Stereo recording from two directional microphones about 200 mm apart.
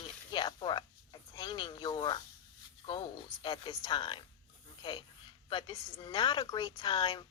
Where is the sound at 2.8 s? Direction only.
25° left (ahead or behind).